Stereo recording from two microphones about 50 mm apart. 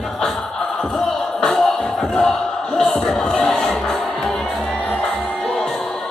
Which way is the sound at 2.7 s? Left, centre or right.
Centre.